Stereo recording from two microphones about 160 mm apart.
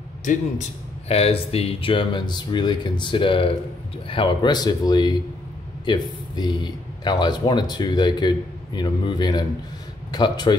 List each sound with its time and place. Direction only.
0.2 s speech: 50° left (ahead or behind); by 10.5 s 25° left (ahead or behind)